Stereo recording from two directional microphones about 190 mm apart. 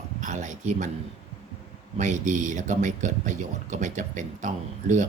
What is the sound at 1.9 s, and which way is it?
Speech, 40° right (ahead or behind).